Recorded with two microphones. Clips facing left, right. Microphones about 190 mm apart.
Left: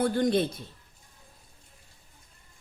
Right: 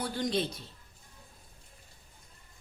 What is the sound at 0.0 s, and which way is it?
Speech, 55° left (ahead or behind).